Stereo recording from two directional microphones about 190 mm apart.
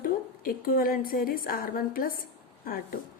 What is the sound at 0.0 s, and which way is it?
A woman's voice, 50° left (ahead or behind).